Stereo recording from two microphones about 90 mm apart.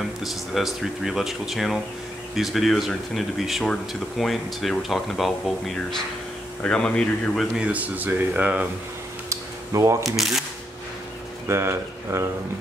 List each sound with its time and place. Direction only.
0.2 s a man's voice: centre (ahead or behind)
7.5 s speech: 15° right (ahead or behind)
9.3 s a sound: 35° right (ahead or behind)
10.0 s speech: centre (ahead or behind)
11.4 s speech: 30° right (ahead or behind)